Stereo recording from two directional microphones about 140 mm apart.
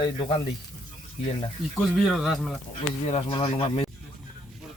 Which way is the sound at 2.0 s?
Centre (ahead or behind).